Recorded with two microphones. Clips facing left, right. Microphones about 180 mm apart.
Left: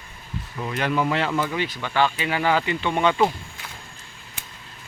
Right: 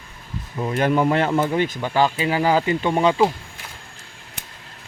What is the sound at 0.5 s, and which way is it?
Speech, 30° right (ahead or behind).